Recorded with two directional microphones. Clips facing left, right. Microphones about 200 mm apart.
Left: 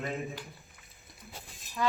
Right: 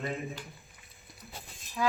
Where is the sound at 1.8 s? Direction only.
5° right (ahead or behind).